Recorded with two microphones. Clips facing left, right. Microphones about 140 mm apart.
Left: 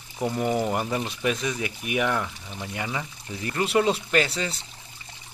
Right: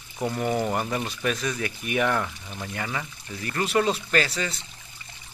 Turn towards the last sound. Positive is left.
turn(degrees=25)  # may be behind; listen again after turning